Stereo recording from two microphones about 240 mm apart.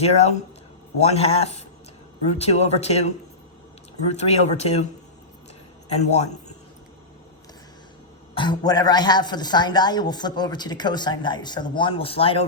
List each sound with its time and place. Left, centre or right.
0.0 s speech: left
4.1 s speech: left
5.9 s speech: left
8.4 s speech: centre